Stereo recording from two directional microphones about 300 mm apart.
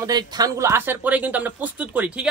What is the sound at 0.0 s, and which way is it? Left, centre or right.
Speech, centre.